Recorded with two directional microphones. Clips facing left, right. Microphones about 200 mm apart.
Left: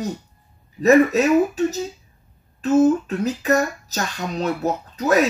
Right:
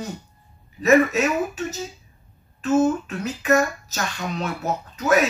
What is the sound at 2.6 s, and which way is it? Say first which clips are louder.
Speech: left 3 dB; 35° left (ahead or behind).